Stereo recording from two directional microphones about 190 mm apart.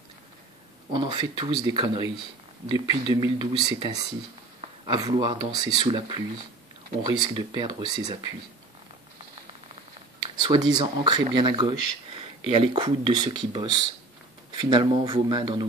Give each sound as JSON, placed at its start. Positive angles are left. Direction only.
{"t": 0.9, "sound": "speech", "side_deg": -25}
{"t": 10.4, "sound": "speech", "side_deg": -25}